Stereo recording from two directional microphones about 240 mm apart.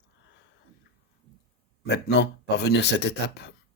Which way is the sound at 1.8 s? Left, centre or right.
Left.